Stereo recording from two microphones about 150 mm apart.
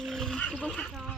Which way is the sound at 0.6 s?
5° left (ahead or behind).